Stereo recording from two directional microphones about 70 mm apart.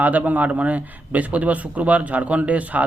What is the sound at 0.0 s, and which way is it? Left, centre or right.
Speech, right.